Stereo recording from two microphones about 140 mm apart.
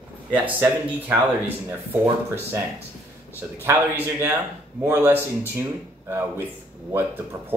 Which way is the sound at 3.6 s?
15° right (ahead or behind).